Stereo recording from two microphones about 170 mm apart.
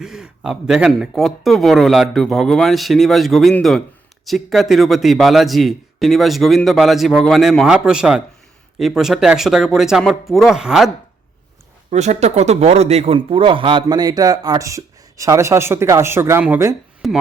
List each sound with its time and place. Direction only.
0.0 s a man's voice: 5° right (ahead or behind)
11.9 s a man's voice: 40° right (ahead or behind); by 16.7 s 10° right (ahead or behind)
17.0 s a man's voice: centre (ahead or behind)